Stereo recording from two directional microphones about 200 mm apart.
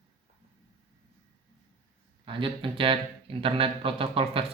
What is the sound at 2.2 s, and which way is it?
Speech, 25° right (ahead or behind).